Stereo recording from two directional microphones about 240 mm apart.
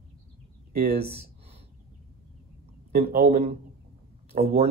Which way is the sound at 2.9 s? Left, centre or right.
Right.